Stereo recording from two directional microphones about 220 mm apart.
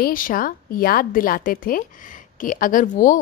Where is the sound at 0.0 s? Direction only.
40° left (ahead or behind).